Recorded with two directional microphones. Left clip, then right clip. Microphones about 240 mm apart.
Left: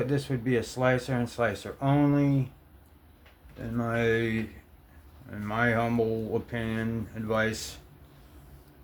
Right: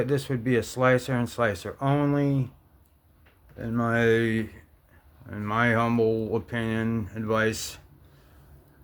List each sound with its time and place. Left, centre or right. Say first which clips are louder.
0.0 s speech: right 3 dB; right
3.8 s speech: right 4 dB; right